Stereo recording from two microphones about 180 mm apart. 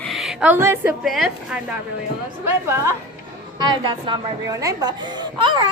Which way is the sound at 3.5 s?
25° right (ahead or behind).